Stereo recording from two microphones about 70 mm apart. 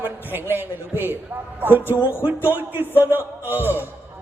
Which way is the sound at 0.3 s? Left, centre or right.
Right.